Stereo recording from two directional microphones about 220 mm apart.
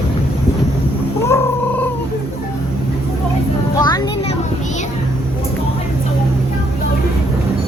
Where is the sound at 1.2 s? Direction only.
10° left (ahead or behind).